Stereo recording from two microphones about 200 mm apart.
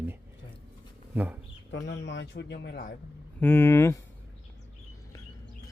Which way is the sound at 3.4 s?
10° left (ahead or behind).